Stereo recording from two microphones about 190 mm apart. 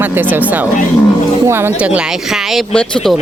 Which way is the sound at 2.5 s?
Centre (ahead or behind).